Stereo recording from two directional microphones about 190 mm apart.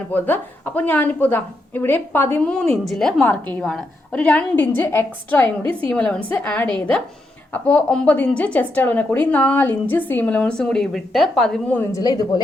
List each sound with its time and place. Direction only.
0.1 s a woman's voice: 10° left (ahead or behind)
11.9 s speech: 20° left (ahead or behind)